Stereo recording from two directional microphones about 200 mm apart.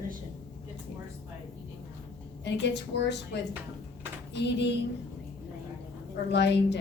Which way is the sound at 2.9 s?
60° left (ahead or behind).